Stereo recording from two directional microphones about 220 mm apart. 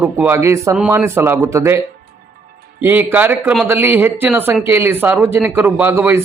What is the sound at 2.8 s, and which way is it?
Speech, 10° right (ahead or behind).